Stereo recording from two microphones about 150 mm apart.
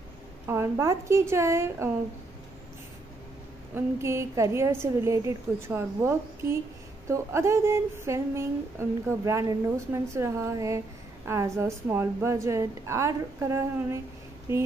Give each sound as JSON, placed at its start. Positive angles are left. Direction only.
{"t": 0.5, "sound": "a woman's voice", "side_deg": -20}
{"t": 3.7, "sound": "a woman's voice", "side_deg": -20}